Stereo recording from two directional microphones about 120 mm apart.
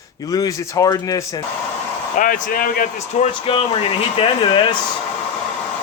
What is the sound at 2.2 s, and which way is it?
Speech, 90° left.